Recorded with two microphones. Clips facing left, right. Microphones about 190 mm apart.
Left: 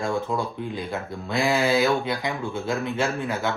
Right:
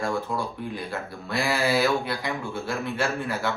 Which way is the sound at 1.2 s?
20° left (ahead or behind).